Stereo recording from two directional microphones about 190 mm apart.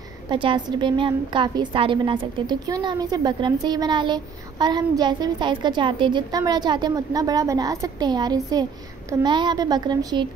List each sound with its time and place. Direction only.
0.3 s a woman's voice: 25° right (ahead or behind)